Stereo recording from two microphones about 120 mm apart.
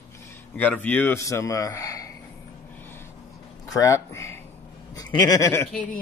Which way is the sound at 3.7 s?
25° left (ahead or behind).